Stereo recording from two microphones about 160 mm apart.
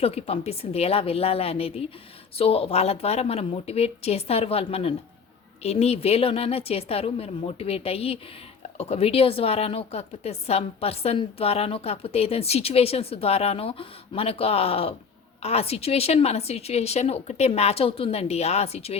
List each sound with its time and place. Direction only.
0.0 s a woman's voice: 40° left (ahead or behind)